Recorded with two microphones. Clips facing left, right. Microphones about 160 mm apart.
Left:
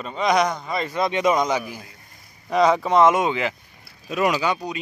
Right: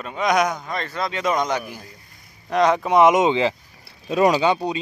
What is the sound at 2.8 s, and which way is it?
Speech, 15° right (ahead or behind).